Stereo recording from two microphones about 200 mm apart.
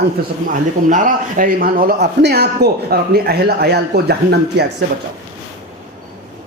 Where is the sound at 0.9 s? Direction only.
40° right (ahead or behind); by 4.7 s 55° right (ahead or behind).